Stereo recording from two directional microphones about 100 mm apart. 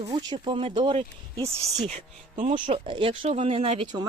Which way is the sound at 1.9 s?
90° right.